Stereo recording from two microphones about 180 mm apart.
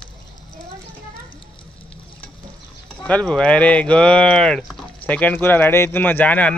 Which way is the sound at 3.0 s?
5° left (ahead or behind).